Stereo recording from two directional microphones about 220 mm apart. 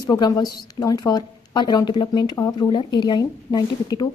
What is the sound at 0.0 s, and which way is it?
Speech, 15° left (ahead or behind).